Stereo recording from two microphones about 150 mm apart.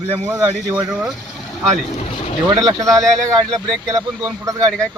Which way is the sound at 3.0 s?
5° left (ahead or behind).